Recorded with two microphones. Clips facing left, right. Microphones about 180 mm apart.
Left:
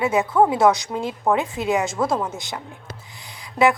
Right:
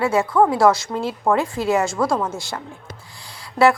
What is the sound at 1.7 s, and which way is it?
Speech, centre (ahead or behind).